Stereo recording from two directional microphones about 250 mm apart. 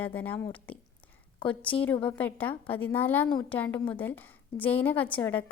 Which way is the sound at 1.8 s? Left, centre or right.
Centre.